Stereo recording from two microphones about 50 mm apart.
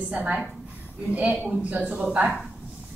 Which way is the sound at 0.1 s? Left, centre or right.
Right.